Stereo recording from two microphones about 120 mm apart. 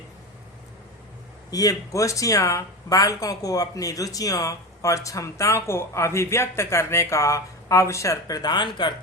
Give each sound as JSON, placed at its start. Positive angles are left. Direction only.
{"t": 1.5, "sound": "speech", "side_deg": 30}